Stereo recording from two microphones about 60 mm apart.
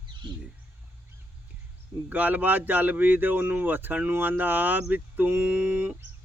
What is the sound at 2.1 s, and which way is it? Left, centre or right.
Speech, right.